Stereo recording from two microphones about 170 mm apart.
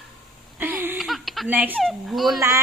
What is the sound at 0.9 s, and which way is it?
Speech, centre (ahead or behind).